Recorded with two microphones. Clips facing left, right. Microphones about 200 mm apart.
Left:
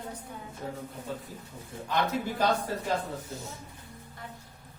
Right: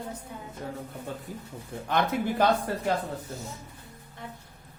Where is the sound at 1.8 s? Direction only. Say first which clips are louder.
Right 3 dB; 55° right (ahead or behind).